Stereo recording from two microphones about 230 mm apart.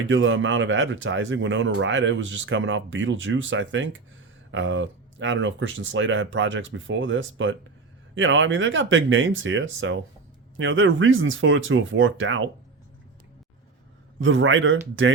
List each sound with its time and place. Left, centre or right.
0.1 s speech: right
14.2 s speech: right